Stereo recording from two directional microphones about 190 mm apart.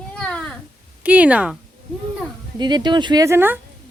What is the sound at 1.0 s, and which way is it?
Speech, 5° right (ahead or behind).